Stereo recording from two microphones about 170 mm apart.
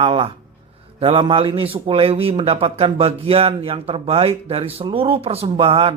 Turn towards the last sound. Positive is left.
turn(degrees=-35)  # may be behind; listen again after turning